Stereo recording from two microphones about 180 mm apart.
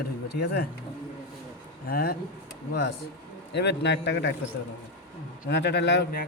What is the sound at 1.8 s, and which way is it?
Speech, 55° left (ahead or behind).